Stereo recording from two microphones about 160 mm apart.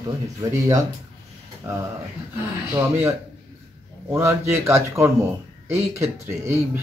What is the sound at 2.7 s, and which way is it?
Speech, 15° right (ahead or behind).